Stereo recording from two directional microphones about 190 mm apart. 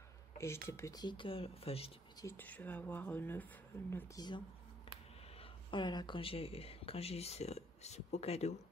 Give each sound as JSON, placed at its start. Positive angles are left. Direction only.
{"t": 0.4, "sound": "speech", "side_deg": 15}
{"t": 2.2, "sound": "speech", "side_deg": 10}
{"t": 5.4, "sound": "speech", "side_deg": 25}